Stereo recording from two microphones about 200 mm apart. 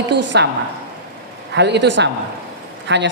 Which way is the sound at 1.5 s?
60° right (ahead or behind).